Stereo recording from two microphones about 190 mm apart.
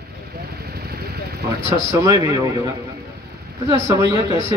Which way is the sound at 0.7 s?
55° right (ahead or behind).